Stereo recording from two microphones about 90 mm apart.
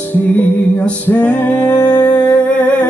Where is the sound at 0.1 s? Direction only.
20° left (ahead or behind).